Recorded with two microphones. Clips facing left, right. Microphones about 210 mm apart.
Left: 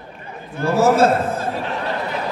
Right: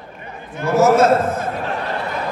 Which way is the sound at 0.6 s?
30° left (ahead or behind).